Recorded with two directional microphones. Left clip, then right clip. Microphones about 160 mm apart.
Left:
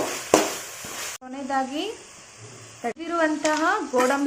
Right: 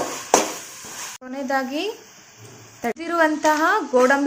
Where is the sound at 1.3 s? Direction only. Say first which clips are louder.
Right 3 dB; 25° right (ahead or behind).